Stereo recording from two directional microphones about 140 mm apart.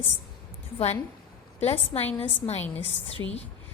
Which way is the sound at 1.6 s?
45° left (ahead or behind).